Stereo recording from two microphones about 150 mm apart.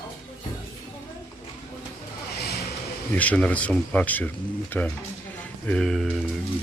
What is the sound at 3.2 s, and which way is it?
Speech, 10° left (ahead or behind).